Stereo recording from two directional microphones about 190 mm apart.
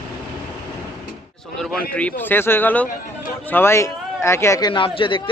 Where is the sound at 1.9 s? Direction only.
10° left (ahead or behind).